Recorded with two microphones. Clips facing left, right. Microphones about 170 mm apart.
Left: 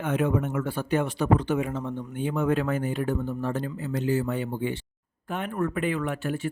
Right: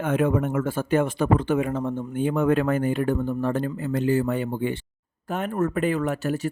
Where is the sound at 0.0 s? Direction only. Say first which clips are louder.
Right 3 dB; 50° right (ahead or behind).